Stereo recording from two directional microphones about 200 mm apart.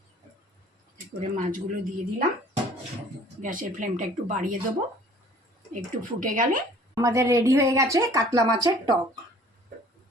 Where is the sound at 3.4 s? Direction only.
40° right (ahead or behind).